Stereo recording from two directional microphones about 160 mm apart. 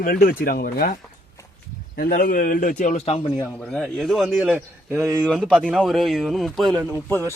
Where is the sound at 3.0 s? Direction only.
35° left (ahead or behind).